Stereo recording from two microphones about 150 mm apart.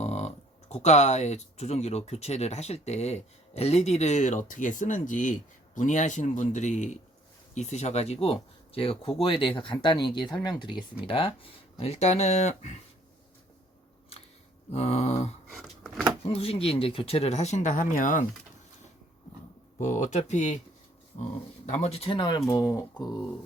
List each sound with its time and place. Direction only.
0.0 s speech: 45° left (ahead or behind)
14.7 s speech: 45° left (ahead or behind)
15.5 s door: centre (ahead or behind)
16.2 s speech: 40° left (ahead or behind); by 18.3 s 60° left (ahead or behind)
19.8 s speech: 55° left (ahead or behind)
21.7 s speech: 45° left (ahead or behind); by 23.2 s 30° left (ahead or behind)